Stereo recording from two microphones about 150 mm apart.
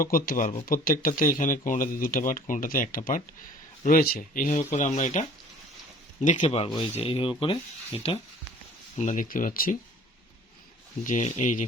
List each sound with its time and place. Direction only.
0.0 s speech: 70° left (ahead or behind)
3.8 s speech: 75° left (ahead or behind); by 5.2 s 55° left (ahead or behind)
6.2 s speech: 55° left (ahead or behind)
6.9 s speech: 40° left (ahead or behind)
9.0 s speech: 55° left (ahead or behind)
11.0 s speech: 55° left (ahead or behind)